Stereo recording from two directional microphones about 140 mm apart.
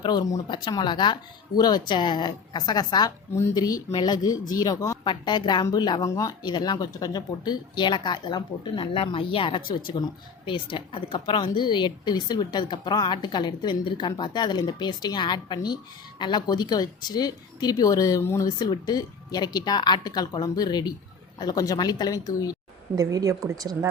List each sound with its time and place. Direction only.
0.0 s speech: 30° left (ahead or behind)
23.0 s speech: 25° right (ahead or behind)